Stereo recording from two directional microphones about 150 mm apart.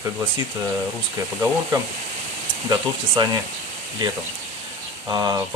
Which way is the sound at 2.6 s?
25° right (ahead or behind).